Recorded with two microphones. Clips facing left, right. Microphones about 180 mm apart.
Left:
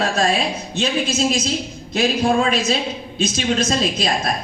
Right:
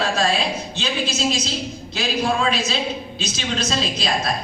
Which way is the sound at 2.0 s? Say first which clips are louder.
Left 5 dB; 50° left (ahead or behind).